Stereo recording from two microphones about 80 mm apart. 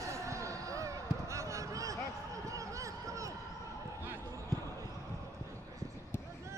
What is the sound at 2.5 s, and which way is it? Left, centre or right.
Run, right.